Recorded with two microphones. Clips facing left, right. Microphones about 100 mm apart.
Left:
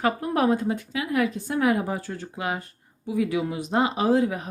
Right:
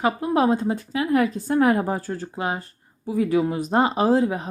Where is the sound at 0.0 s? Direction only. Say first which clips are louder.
Right 2 dB; 20° right (ahead or behind).